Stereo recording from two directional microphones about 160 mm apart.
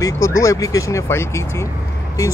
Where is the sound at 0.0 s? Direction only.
20° left (ahead or behind).